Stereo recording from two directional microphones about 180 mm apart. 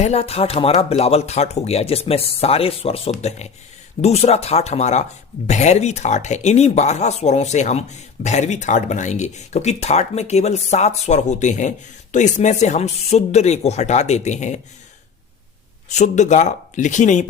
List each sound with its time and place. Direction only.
0.0 s speech: 35° left (ahead or behind)
15.9 s speech: 40° left (ahead or behind)